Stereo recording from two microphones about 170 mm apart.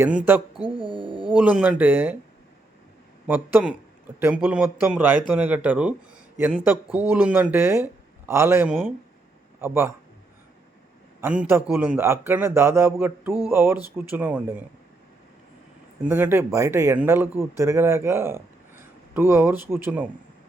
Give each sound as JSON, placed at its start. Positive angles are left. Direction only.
{"t": 0.0, "sound": "a man's voice", "side_deg": -10}
{"t": 0.8, "sound": "speech", "side_deg": -30}
{"t": 1.3, "sound": "a man's voice", "side_deg": -5}
{"t": 3.2, "sound": "a man's voice", "side_deg": -10}
{"t": 11.2, "sound": "a man's voice", "side_deg": -10}
{"t": 16.0, "sound": "a man's voice", "side_deg": -15}